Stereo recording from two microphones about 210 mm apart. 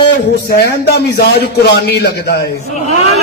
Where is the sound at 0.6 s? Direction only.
50° left (ahead or behind).